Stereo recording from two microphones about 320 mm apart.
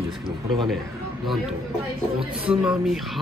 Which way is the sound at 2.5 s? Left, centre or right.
Centre.